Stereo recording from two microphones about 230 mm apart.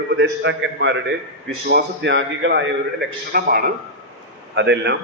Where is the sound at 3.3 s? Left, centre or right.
Right.